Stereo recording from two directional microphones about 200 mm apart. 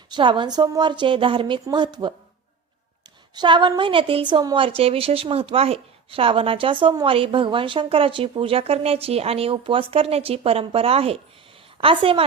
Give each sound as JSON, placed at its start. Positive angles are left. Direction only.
{"t": 0.1, "sound": "a woman's voice", "side_deg": -25}
{"t": 3.3, "sound": "a woman's voice", "side_deg": -25}